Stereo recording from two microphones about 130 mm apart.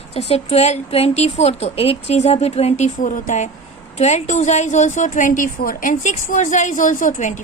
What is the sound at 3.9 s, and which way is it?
A woman's voice, 60° left (ahead or behind).